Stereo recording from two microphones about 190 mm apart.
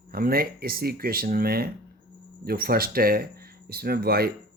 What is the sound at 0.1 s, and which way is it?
Speech, 50° right (ahead or behind).